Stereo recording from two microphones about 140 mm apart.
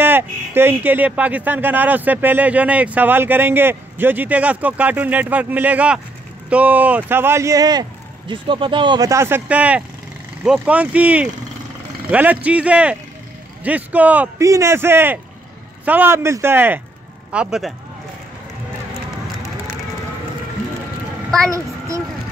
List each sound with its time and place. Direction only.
0.0 s speech: 15° right (ahead or behind)
14.4 s a man's voice: 20° right (ahead or behind); by 17.7 s centre (ahead or behind)
21.5 s a woman's voice: 25° right (ahead or behind)